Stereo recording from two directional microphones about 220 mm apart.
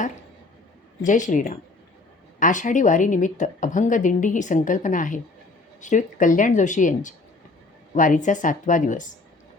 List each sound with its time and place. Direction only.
1.0 s a woman's voice: 35° left (ahead or behind)